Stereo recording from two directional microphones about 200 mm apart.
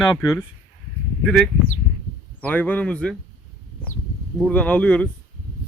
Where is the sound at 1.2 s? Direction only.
5° left (ahead or behind).